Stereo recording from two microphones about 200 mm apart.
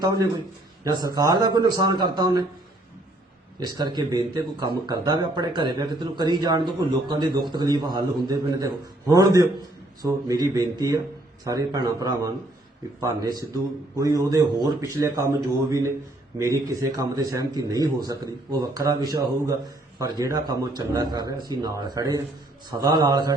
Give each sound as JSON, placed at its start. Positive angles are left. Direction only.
{"t": 0.0, "sound": "speech", "side_deg": -20}
{"t": 3.7, "sound": "speech", "side_deg": -20}
{"t": 16.4, "sound": "speech", "side_deg": -15}